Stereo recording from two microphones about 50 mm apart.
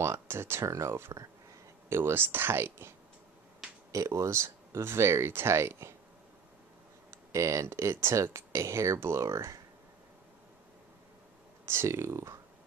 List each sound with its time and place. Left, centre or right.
0.0 s speech: right
3.9 s speech: right
7.3 s speech: right
11.6 s speech: right